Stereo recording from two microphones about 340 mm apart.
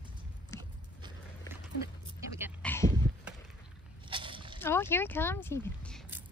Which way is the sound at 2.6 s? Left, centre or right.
Centre.